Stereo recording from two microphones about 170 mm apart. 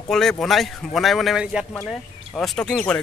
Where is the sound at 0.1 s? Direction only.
5° left (ahead or behind).